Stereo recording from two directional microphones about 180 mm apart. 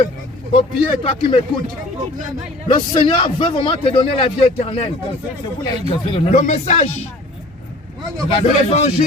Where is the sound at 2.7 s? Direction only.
30° left (ahead or behind).